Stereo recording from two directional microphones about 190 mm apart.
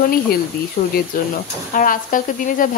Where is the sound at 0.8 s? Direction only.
45° left (ahead or behind).